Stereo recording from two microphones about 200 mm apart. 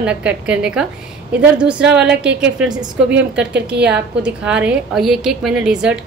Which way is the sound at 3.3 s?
60° right (ahead or behind).